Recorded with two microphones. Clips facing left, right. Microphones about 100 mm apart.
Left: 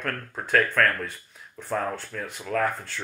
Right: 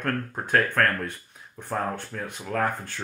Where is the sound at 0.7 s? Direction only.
40° right (ahead or behind).